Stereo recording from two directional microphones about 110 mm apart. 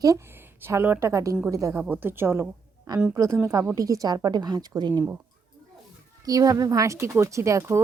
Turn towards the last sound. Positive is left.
turn(degrees=-25)  # may be behind; listen again after turning